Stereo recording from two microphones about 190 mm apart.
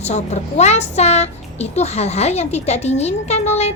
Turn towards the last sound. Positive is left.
turn(degrees=35)  # may be behind; listen again after turning